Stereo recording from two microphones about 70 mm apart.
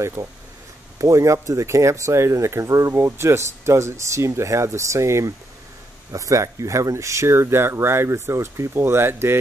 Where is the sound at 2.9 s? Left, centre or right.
Right.